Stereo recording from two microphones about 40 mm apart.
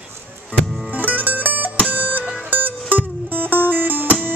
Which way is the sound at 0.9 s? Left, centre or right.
Right.